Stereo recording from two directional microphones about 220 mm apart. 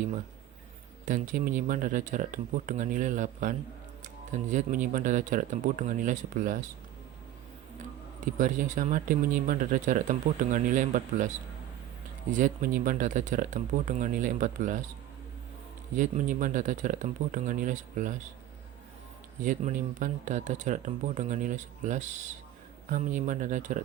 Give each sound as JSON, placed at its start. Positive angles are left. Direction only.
{"t": 1.0, "sound": "speech", "side_deg": -35}
{"t": 8.4, "sound": "speech", "side_deg": -35}
{"t": 12.3, "sound": "speech", "side_deg": -35}
{"t": 16.0, "sound": "speech", "side_deg": -35}
{"t": 19.4, "sound": "speech", "side_deg": -35}